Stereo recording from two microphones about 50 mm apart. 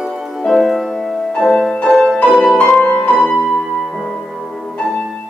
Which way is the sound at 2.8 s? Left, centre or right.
Left.